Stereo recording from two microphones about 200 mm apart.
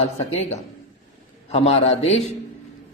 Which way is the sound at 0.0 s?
30° left (ahead or behind).